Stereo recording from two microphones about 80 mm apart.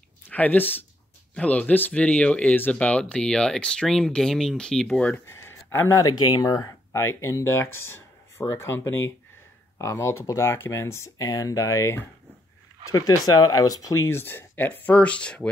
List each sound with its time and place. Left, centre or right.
0.3 s speech: left
5.2 s a sound: left
5.9 s speech: left
6.9 s speech: left
11.1 s speech: left
12.9 s speech: left; by 15.5 s centre